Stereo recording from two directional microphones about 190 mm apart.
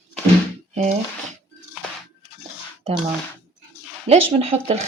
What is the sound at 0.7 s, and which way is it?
Speech, 35° right (ahead or behind).